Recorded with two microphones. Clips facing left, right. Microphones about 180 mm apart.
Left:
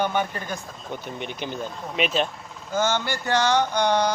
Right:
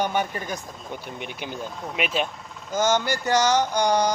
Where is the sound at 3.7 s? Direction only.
15° right (ahead or behind).